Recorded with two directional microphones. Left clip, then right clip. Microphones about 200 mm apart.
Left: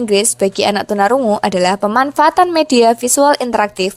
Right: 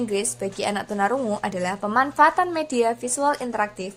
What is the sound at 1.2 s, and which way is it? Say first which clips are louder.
Speech: left 12 dB; 25° left (ahead or behind).